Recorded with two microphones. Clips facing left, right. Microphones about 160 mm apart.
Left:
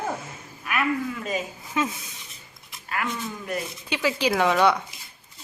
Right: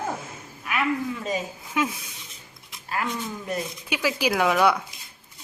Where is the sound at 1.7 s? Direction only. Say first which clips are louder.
Right 1 dB; 5° right (ahead or behind).